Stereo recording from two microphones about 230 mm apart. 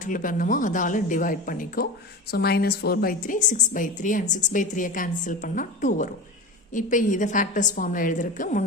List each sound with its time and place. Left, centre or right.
0.0 s a woman's voice: left